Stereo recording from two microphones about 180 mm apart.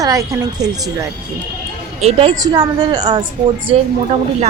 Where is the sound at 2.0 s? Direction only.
25° right (ahead or behind).